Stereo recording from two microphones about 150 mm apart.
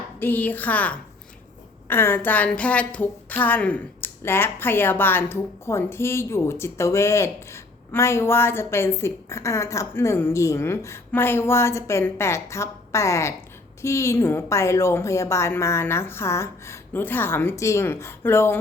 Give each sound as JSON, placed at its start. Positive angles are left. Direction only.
{"t": 0.2, "sound": "a woman's voice", "side_deg": 10}